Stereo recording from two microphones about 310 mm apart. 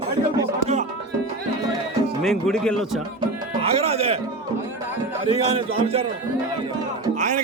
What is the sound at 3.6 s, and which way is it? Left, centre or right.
Speech, centre.